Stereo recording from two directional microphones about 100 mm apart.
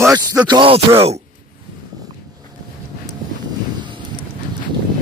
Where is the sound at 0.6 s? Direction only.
75° right (ahead or behind); by 1.2 s 90° right.